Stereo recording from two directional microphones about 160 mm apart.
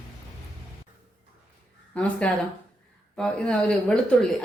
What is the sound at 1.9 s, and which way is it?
A woman's voice, 10° left (ahead or behind).